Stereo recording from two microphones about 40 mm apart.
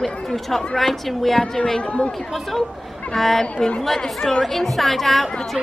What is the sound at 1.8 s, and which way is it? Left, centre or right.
Speech, left.